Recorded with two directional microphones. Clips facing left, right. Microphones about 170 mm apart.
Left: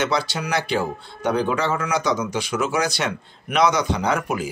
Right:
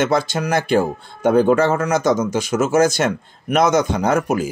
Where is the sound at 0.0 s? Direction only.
50° right (ahead or behind).